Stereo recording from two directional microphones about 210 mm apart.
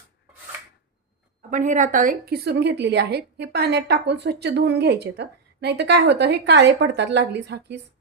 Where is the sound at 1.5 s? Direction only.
35° right (ahead or behind).